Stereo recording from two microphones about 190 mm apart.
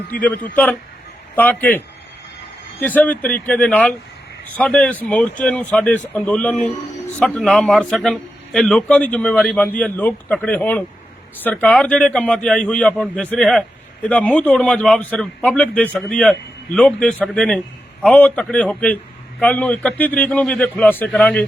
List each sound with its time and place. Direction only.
0.1 s a man's voice: 10° left (ahead or behind)
2.8 s a man's voice: 10° left (ahead or behind)